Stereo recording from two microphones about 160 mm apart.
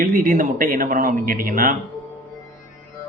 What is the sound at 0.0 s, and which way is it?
A man's voice, 60° right (ahead or behind).